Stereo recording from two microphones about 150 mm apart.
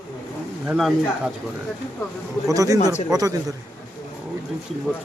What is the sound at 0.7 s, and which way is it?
Speech, 5° right (ahead or behind).